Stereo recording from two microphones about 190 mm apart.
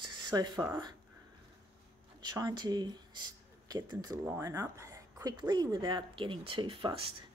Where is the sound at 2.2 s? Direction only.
20° right (ahead or behind).